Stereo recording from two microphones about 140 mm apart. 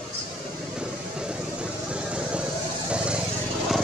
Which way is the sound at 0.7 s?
5° right (ahead or behind).